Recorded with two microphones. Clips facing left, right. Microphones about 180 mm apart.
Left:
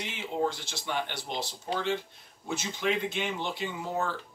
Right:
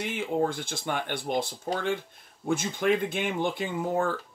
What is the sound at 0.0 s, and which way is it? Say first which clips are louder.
Speech: right 4 dB; 50° right (ahead or behind).